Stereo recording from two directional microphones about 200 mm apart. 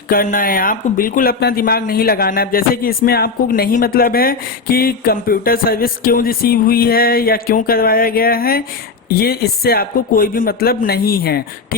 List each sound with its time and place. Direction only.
0.1 s speech: 45° left (ahead or behind)